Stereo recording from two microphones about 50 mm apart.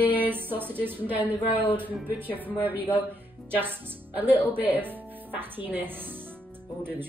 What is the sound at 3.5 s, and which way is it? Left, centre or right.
A woman's voice, right.